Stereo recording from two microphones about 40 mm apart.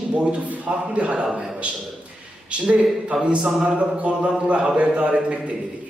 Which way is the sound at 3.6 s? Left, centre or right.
Right.